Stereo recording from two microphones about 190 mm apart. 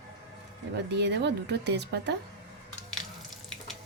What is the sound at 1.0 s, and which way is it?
A woman's voice, 65° right (ahead or behind).